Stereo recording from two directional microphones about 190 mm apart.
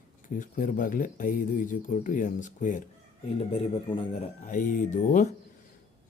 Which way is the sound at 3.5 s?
30° left (ahead or behind).